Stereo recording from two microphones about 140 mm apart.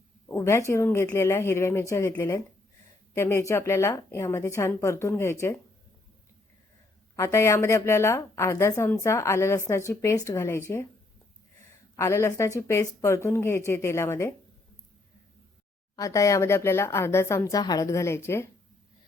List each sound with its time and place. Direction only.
0.3 s a woman's voice: 20° left (ahead or behind)
7.2 s a woman's voice: 20° left (ahead or behind)
11.9 s a woman's voice: 20° left (ahead or behind)
16.0 s a woman's voice: 25° left (ahead or behind)